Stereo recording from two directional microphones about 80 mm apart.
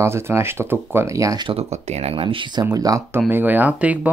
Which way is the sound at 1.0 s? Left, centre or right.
Right.